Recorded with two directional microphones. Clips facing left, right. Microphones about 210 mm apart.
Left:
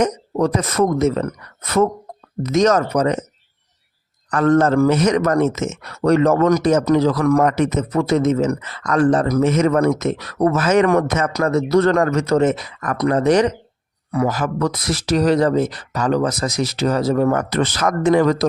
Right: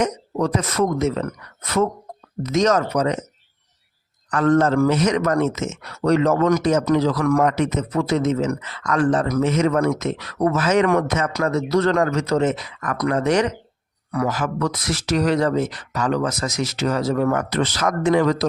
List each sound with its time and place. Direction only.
0.0 s speech: 40° left (ahead or behind)
4.3 s speech: 45° left (ahead or behind)
9.5 s speech: 50° left (ahead or behind)